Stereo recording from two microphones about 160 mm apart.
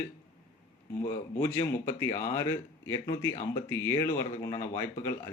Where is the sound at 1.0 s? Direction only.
20° left (ahead or behind).